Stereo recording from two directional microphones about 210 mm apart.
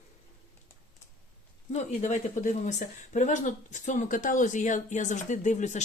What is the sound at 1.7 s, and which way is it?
Speech, 35° left (ahead or behind).